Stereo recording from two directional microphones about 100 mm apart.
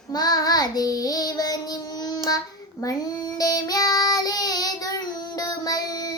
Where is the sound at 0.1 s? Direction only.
40° left (ahead or behind).